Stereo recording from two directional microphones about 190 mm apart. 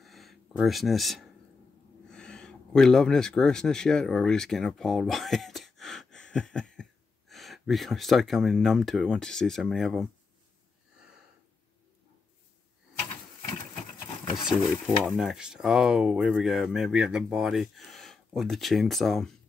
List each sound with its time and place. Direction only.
0.0 s a sound: centre (ahead or behind)
2.0 s speech: 5° left (ahead or behind)
14.3 s speech: 5° right (ahead or behind)